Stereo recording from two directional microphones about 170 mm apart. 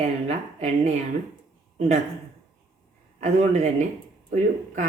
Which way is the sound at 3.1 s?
40° right (ahead or behind).